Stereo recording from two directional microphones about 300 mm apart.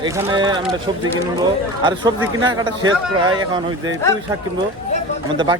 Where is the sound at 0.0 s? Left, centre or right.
Centre.